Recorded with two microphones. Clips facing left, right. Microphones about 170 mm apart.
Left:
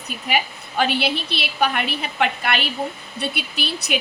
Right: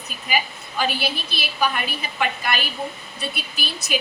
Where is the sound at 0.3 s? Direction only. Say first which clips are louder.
Left 2 dB; 65° left (ahead or behind).